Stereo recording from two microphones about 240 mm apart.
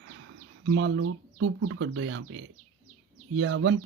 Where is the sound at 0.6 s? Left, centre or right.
Right.